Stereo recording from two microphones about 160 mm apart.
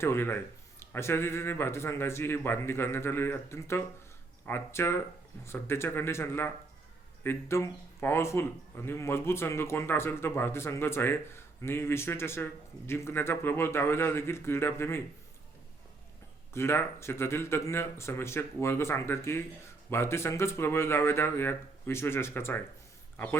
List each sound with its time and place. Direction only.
0.0 s speech: 15° left (ahead or behind)
16.5 s a man's voice: 15° left (ahead or behind)